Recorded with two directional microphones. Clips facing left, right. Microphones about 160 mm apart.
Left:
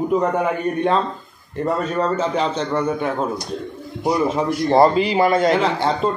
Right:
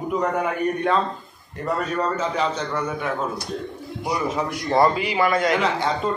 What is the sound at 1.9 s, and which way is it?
A man's voice, 30° left (ahead or behind).